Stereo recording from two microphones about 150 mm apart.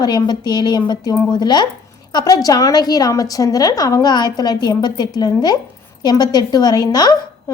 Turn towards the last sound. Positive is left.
turn(degrees=25)  # may be behind; listen again after turning